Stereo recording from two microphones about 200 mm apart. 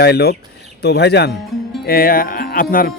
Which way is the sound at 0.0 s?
50° left (ahead or behind).